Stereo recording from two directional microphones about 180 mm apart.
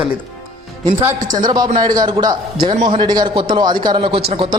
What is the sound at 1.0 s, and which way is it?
A man's voice, 20° right (ahead or behind).